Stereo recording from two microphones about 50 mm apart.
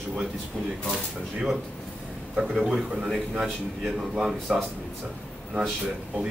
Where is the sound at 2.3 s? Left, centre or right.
Centre.